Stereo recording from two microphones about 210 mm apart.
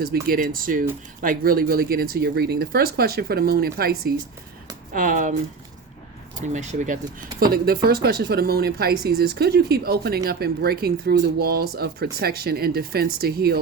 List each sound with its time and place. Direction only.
0.0 s speech: 45° right (ahead or behind)
6.5 s speech: 35° right (ahead or behind)